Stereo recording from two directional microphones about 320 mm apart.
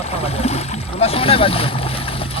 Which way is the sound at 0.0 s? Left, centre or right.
Centre.